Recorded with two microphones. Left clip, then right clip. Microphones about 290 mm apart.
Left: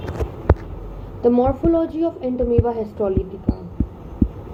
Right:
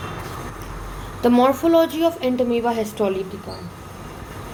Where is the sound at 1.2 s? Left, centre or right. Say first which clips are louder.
Even; right.